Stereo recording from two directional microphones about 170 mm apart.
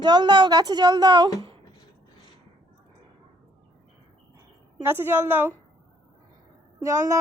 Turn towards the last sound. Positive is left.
turn(degrees=-15)  # may be behind; listen again after turning